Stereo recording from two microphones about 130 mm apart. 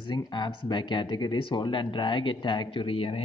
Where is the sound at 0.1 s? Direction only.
35° left (ahead or behind).